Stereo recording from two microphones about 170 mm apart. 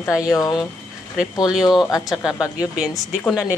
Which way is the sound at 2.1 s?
Centre (ahead or behind).